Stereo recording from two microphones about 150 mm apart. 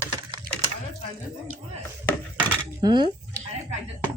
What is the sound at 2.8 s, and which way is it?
Speech, 25° right (ahead or behind).